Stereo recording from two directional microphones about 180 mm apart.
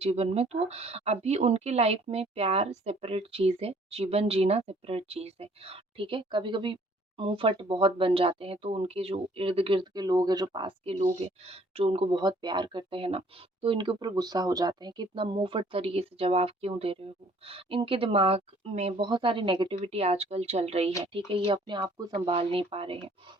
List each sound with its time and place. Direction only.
0.0 s speech: 35° right (ahead or behind)